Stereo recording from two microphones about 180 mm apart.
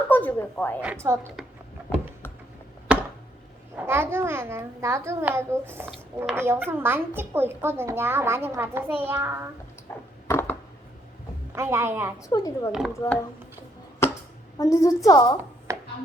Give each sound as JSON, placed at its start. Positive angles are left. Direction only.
{"t": 0.1, "sound": "a woman's voice", "side_deg": 10}
{"t": 0.8, "sound": "a woman's voice", "side_deg": -10}
{"t": 2.9, "sound": "a sound", "side_deg": -5}
{"t": 3.8, "sound": "a woman's voice", "side_deg": -10}
{"t": 10.2, "sound": "a sound", "side_deg": 15}
{"t": 11.5, "sound": "a woman's voice", "side_deg": -15}
{"t": 12.3, "sound": "a woman's voice", "side_deg": 20}
{"t": 12.7, "sound": "speech", "side_deg": 0}
{"t": 14.6, "sound": "a woman's voice", "side_deg": 20}
{"t": 15.7, "sound": "a sound", "side_deg": -15}